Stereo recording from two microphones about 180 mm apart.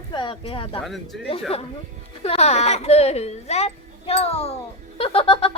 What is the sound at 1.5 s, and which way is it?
Speech, 35° left (ahead or behind).